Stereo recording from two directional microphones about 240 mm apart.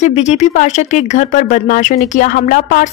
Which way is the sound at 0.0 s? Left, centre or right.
Left.